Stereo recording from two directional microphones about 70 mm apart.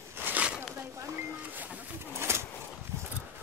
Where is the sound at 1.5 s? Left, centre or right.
Right.